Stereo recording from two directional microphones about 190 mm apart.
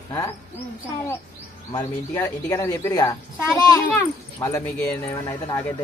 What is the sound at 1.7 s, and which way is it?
A woman's voice, 15° left (ahead or behind).